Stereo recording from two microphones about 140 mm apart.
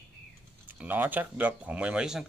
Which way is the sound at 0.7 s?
15° right (ahead or behind).